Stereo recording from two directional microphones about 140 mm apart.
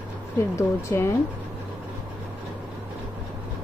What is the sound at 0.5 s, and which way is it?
Speech, 20° left (ahead or behind).